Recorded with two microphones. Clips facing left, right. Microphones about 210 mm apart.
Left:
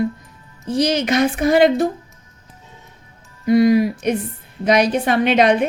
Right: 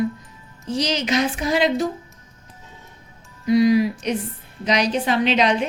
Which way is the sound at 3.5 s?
50° left (ahead or behind).